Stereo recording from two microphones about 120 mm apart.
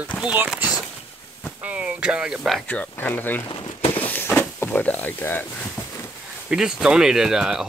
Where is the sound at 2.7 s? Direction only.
15° left (ahead or behind).